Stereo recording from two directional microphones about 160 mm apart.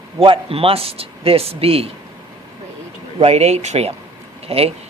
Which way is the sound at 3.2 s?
40° right (ahead or behind).